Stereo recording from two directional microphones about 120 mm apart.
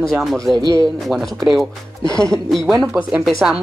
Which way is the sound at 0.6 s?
30° right (ahead or behind).